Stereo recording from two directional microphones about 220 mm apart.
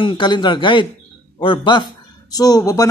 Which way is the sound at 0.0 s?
20° left (ahead or behind).